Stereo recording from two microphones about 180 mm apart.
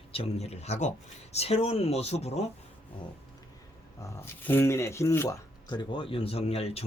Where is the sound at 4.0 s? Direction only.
15° left (ahead or behind).